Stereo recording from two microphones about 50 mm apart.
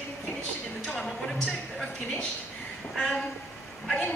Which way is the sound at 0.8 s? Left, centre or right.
Centre.